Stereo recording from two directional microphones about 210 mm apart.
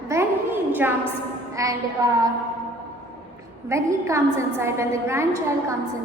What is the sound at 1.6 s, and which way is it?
Speech, 15° right (ahead or behind).